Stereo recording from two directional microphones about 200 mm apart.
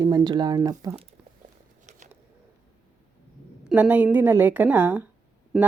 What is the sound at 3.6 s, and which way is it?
Speech, 5° right (ahead or behind).